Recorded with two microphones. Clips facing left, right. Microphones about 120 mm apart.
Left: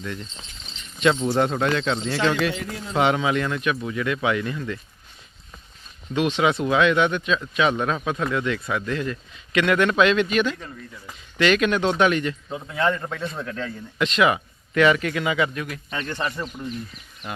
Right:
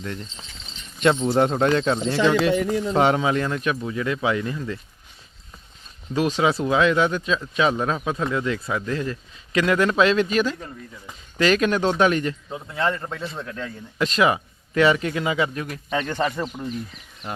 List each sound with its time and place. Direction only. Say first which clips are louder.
0.0 s a man's voice: even; 40° right (ahead or behind)
1.3 s a man's voice: right 2 dB; 30° right (ahead or behind)
2.6 s a man's voice: right 3 dB; 40° right (ahead or behind)
6.4 s a man's voice: even; 30° right (ahead or behind)
12.5 s a man's voice: left 1 dB; centre (ahead or behind)
14.0 s a man's voice: even; 35° right (ahead or behind)